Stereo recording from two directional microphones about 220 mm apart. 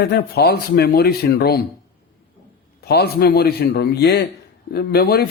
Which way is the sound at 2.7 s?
45° left (ahead or behind).